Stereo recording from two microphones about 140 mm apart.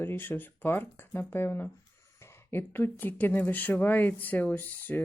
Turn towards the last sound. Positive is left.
turn(degrees=10)  # may be behind; listen again after turning